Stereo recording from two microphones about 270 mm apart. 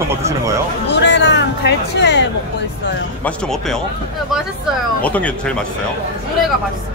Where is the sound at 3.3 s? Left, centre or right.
Centre.